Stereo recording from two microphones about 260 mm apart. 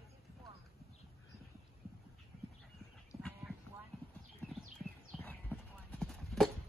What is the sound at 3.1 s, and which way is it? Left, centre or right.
Clip-clop, centre.